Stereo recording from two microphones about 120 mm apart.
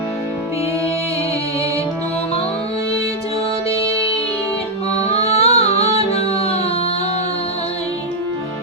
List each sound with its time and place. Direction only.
5.0 s music: 55° left (ahead or behind)